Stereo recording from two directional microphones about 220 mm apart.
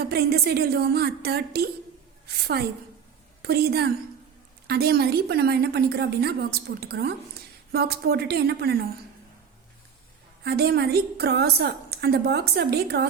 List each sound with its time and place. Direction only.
0.0 s a woman's voice: 45° right (ahead or behind)
10.4 s a woman's voice: 45° right (ahead or behind)